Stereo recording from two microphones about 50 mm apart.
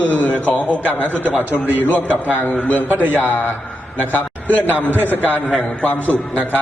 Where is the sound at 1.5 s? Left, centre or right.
Right.